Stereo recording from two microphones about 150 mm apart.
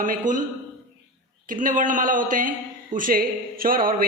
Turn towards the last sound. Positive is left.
turn(degrees=-75)  # may be behind; listen again after turning